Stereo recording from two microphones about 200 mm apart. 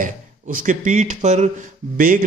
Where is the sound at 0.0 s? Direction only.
45° right (ahead or behind).